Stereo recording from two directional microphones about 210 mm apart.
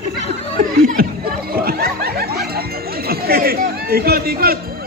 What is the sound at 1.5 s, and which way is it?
Snicker, 45° right (ahead or behind).